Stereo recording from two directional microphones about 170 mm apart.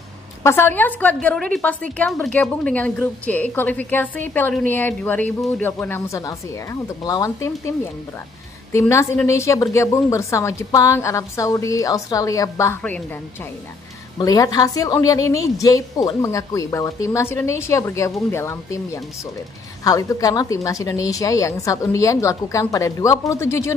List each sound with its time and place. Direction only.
0.4 s a woman's voice: 15° left (ahead or behind)
14.1 s a woman's voice: 20° left (ahead or behind)